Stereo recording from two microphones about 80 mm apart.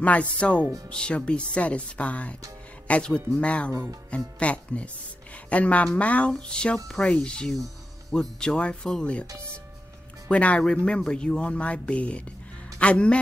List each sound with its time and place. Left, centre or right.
0.0 s speech: centre
10.3 s speech: centre